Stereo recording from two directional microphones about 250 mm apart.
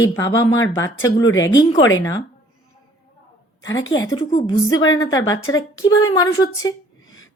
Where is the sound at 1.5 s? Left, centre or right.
Centre.